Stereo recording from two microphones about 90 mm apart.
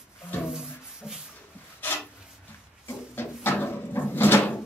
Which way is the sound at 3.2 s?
25° left (ahead or behind).